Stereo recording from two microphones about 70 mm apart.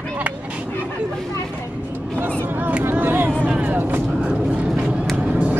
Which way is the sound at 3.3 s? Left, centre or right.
Centre.